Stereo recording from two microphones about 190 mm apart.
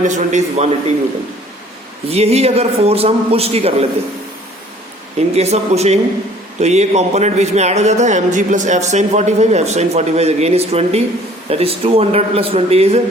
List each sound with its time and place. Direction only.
0.0 s speech: 40° right (ahead or behind)
2.0 s speech: 35° right (ahead or behind)
5.3 s speech: 35° right (ahead or behind)